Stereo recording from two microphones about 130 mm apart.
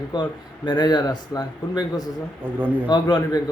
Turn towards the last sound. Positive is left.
turn(degrees=30)  # may be behind; listen again after turning